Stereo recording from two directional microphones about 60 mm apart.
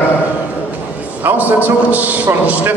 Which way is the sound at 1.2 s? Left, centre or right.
Right.